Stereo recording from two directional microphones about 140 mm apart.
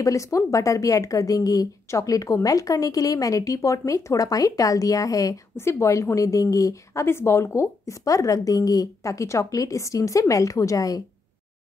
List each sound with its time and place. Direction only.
0.0 s a woman's voice: 20° left (ahead or behind)